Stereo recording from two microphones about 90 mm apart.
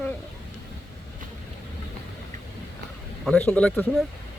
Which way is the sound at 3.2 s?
10° left (ahead or behind).